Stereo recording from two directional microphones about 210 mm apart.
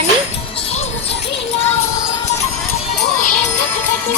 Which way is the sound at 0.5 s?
30° left (ahead or behind).